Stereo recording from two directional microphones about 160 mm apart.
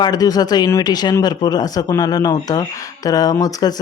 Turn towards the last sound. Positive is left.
turn(degrees=25)  # may be behind; listen again after turning